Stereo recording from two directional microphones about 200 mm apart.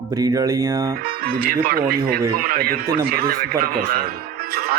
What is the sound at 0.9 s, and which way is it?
Speech, 50° right (ahead or behind).